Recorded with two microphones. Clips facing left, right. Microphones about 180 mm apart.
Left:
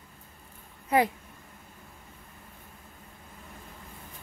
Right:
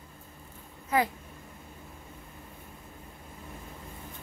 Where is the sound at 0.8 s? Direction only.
20° left (ahead or behind).